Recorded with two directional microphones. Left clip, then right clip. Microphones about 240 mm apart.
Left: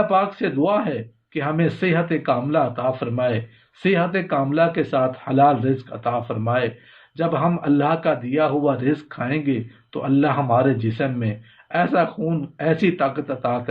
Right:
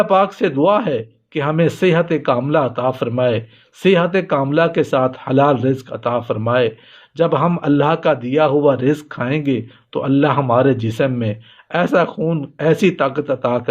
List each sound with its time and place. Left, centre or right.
0.0 s a man's voice: right